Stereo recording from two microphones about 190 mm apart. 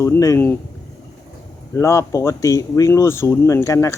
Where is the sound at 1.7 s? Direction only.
15° left (ahead or behind).